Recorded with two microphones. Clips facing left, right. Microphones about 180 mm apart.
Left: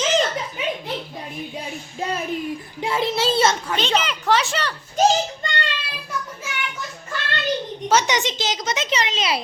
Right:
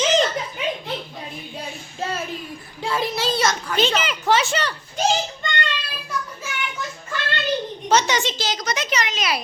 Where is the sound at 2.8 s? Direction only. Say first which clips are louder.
Left 2 dB; 20° left (ahead or behind).